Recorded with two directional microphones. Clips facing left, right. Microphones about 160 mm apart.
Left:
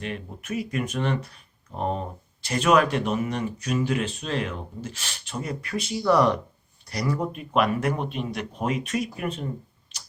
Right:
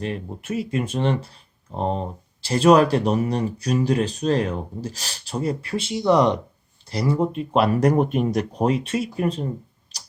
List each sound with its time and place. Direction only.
0.0 s speech: 30° right (ahead or behind)
9.9 s tick-tock: 40° right (ahead or behind)